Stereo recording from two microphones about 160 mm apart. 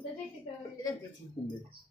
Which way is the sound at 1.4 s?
30° left (ahead or behind).